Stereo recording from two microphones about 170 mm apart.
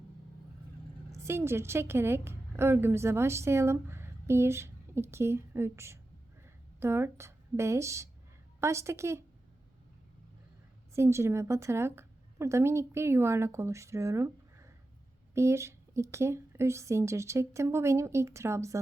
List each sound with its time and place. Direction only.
1.1 s a woman's voice: 15° right (ahead or behind)
10.9 s a woman's voice: 15° right (ahead or behind)